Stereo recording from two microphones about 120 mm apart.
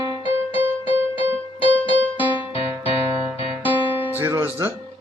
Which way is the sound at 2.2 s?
15° right (ahead or behind).